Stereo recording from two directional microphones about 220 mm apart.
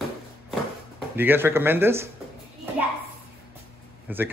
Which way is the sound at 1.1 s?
10° right (ahead or behind).